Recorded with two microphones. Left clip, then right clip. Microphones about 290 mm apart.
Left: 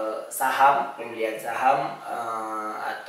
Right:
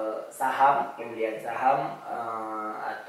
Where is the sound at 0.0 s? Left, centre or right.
Centre.